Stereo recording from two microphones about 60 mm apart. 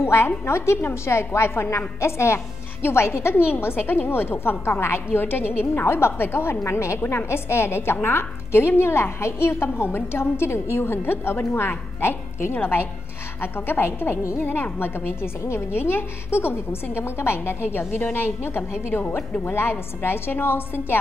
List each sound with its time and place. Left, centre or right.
0.0 s a woman's voice: left